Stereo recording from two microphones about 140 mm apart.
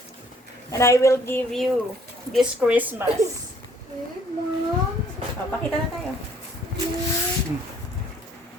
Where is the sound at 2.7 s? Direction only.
10° right (ahead or behind).